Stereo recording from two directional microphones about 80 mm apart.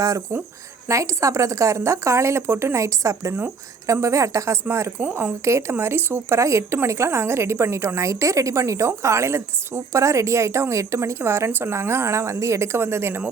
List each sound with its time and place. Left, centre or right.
0.9 s a woman's voice: right